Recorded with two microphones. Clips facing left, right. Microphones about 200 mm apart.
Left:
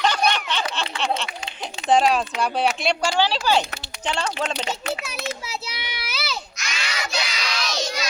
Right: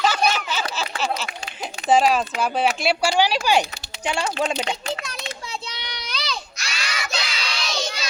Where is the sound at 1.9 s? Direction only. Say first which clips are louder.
Right 1 dB; centre (ahead or behind).